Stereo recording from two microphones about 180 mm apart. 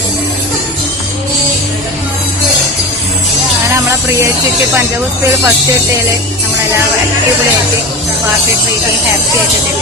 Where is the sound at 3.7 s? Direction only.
15° right (ahead or behind).